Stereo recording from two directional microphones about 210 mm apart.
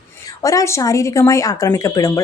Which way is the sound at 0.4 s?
15° left (ahead or behind).